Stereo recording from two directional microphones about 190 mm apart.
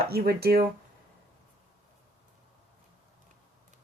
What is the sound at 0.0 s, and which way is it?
Speech, 55° right (ahead or behind).